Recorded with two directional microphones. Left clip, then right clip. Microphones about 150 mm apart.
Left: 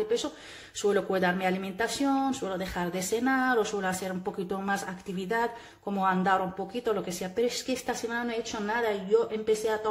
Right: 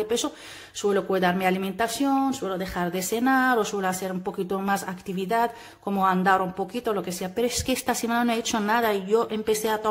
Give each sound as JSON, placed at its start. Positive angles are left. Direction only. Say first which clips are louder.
{"t": 0.8, "sound": "speech", "louder": "right 3 dB", "side_deg": -15}